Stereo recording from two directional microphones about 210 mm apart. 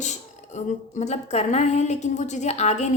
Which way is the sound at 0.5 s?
35° left (ahead or behind).